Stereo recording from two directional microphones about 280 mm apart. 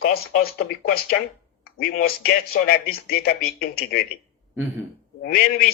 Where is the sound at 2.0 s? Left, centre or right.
Left.